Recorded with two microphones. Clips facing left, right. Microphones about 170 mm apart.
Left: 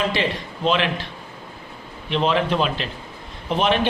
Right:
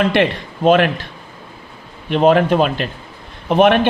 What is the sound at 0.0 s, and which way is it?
A man's voice, 60° right (ahead or behind).